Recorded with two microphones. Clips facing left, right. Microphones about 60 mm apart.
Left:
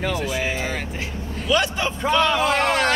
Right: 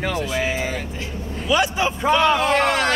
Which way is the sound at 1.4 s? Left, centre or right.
Centre.